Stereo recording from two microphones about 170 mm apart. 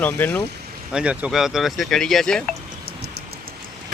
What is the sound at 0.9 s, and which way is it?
Speech, 5° right (ahead or behind).